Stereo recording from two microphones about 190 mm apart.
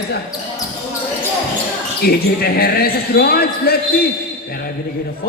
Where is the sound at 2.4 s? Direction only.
55° left (ahead or behind).